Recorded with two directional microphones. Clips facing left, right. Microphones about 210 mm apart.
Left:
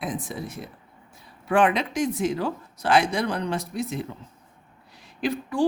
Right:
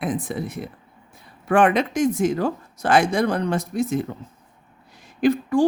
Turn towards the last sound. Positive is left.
turn(degrees=-45)  # may be behind; listen again after turning